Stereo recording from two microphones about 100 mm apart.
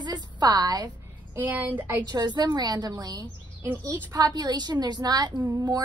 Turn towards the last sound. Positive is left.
turn(degrees=-45)  # may be behind; listen again after turning